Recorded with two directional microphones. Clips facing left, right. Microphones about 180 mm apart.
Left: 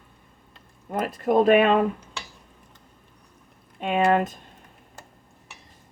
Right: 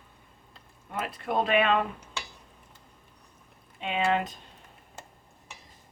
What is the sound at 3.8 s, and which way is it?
Speech, 50° left (ahead or behind).